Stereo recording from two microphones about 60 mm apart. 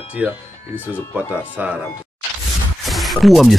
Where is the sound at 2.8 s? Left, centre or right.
Centre.